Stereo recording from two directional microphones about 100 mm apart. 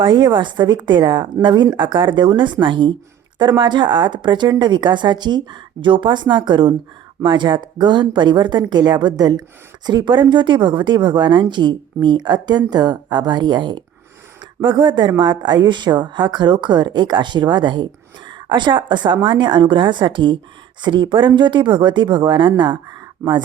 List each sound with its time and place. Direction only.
0.0 s speech: 50° right (ahead or behind)
23.2 s speech: 25° right (ahead or behind)